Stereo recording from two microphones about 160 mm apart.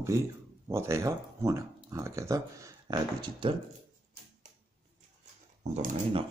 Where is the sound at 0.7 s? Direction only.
15° right (ahead or behind).